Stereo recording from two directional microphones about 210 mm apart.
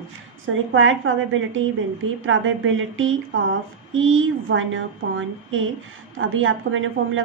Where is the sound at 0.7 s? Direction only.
70° right (ahead or behind).